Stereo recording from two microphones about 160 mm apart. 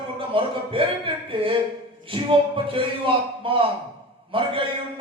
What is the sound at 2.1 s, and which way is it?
A man's voice, 35° right (ahead or behind).